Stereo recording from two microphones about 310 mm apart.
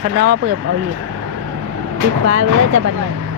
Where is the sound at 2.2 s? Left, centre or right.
Right.